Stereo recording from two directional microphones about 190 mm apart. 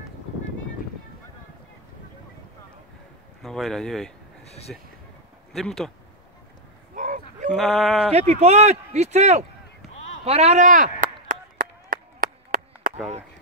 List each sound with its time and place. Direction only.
3.4 s speech: centre (ahead or behind)
4.5 s speech: 35° left (ahead or behind)
5.5 s speech: centre (ahead or behind)
7.0 s cattle: 45° right (ahead or behind)
7.5 s speech: centre (ahead or behind)
8.1 s speech: 35° right (ahead or behind)
10.2 s chop: 35° right (ahead or behind); by 12.9 s 50° right (ahead or behind)